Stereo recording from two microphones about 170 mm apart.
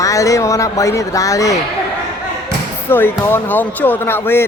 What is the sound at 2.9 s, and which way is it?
Speech, 15° left (ahead or behind).